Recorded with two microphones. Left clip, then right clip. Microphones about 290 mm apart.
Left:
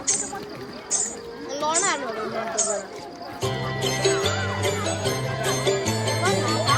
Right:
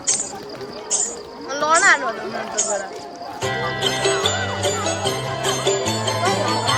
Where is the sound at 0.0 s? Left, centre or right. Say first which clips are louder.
Right 3 dB; right.